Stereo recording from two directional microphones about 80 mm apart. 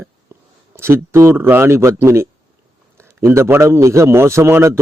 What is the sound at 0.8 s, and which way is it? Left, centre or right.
Speech, right.